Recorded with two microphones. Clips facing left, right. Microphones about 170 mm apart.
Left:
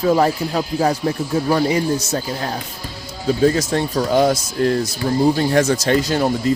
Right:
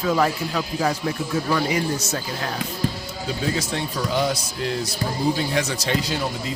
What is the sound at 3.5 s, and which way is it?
Speech, 45° left (ahead or behind).